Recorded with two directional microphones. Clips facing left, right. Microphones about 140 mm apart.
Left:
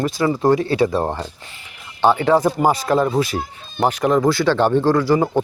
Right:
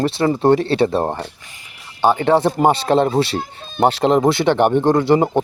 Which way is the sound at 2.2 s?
30° right (ahead or behind).